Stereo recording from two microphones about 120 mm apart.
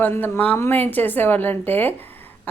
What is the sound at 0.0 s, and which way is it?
Speech, 15° left (ahead or behind).